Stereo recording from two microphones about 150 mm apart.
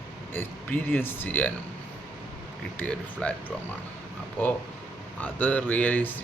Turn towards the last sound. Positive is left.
turn(degrees=10)  # may be behind; listen again after turning